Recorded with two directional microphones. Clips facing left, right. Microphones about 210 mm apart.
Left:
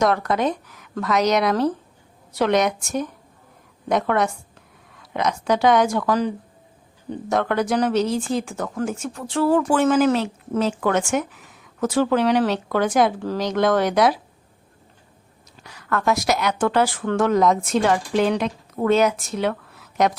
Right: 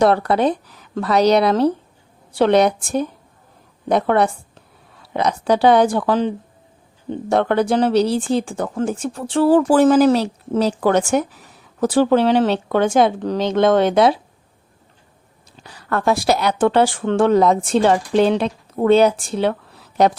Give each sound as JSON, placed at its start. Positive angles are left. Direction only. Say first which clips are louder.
{"t": 0.0, "sound": "speech", "louder": "right 5 dB", "side_deg": -30}
{"t": 15.5, "sound": "speech", "louder": "right 3 dB", "side_deg": -30}